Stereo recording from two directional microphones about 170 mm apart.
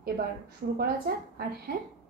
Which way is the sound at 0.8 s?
65° right (ahead or behind).